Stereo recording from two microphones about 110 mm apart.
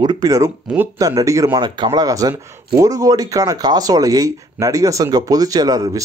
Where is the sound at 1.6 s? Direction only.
40° right (ahead or behind).